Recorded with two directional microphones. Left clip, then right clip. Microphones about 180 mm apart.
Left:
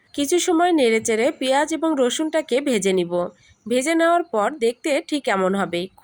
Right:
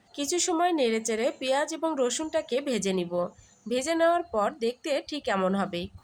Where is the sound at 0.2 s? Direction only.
25° left (ahead or behind).